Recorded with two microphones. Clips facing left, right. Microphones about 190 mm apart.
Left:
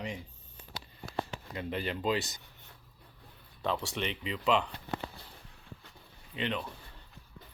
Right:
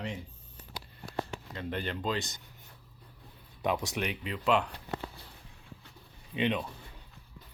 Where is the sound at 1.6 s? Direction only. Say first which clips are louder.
Left 1 dB; 5° left (ahead or behind).